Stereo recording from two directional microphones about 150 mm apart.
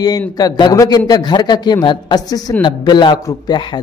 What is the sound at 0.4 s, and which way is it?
A man's voice, 25° left (ahead or behind).